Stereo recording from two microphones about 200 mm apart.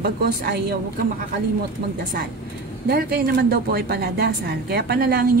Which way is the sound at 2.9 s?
50° right (ahead or behind).